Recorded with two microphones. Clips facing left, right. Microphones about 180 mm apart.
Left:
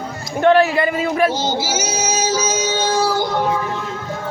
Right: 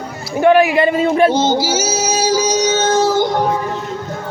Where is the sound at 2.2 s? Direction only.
15° right (ahead or behind).